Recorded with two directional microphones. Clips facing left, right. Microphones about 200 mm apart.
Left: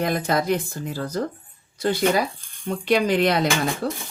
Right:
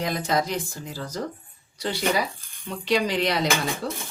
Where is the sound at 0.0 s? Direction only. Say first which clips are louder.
Left 3 dB; 55° left (ahead or behind).